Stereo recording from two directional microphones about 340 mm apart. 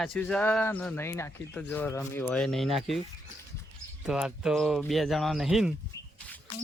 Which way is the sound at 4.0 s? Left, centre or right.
Centre.